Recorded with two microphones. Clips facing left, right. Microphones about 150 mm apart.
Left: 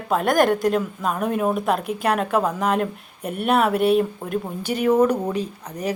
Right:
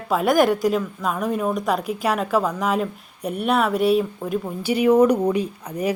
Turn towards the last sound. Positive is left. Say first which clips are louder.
# right 3 dB
turn(degrees=-10)  # may be behind; listen again after turning